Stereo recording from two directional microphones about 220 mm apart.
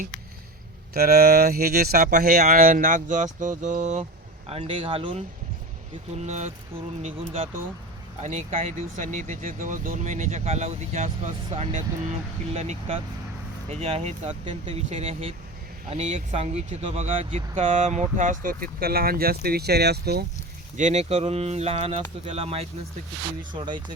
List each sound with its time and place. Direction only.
0.9 s speech: 45° right (ahead or behind); by 5.2 s 25° right (ahead or behind)
6.2 s speech: 30° right (ahead or behind)
8.2 s speech: 30° right (ahead or behind); by 20.2 s 45° right (ahead or behind)
20.7 s speech: 30° right (ahead or behind)